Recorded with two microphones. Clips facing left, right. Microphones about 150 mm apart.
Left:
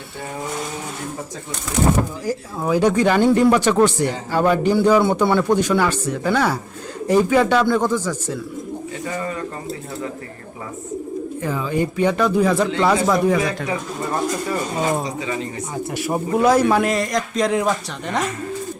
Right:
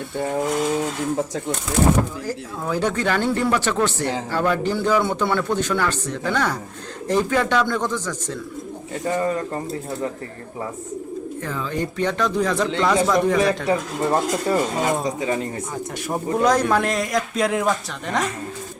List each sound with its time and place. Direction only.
2.2 s a man's voice: 10° left (ahead or behind)
9.1 s speech: 40° right (ahead or behind)
11.4 s a man's voice: 10° left (ahead or behind)
13.7 s speech: 35° right (ahead or behind)
15.0 s speech: 45° right (ahead or behind)
16.0 s a man's voice: 5° left (ahead or behind)